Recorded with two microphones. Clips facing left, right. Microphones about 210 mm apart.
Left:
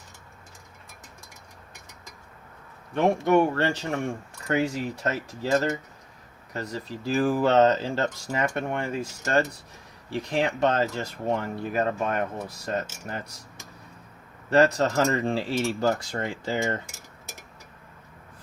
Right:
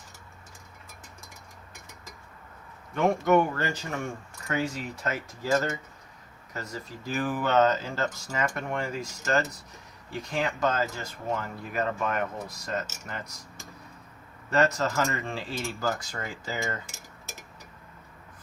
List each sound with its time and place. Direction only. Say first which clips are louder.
2.9 s speech: left 2 dB; 25° left (ahead or behind)
14.5 s speech: left 5 dB; 35° left (ahead or behind)